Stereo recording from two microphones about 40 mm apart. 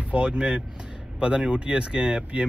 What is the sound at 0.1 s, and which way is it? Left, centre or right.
Speech, right.